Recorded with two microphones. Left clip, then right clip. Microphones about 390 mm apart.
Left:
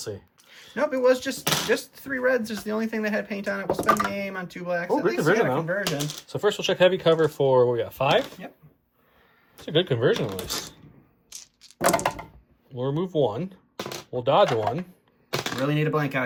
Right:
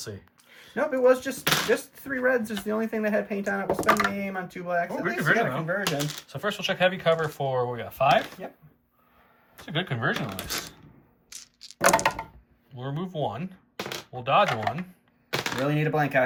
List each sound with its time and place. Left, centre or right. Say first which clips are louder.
0.0 s speech: left 4 dB; centre
6.2 s speech: left 8 dB; centre
8.2 s speech: left 2 dB; centre
9.6 s speech: left 6 dB; centre
10.5 s a sound: left 1 dB; centre
12.8 s speech: left 7 dB; centre
13.7 s chopping: even; centre
14.5 s speech: left 3 dB; centre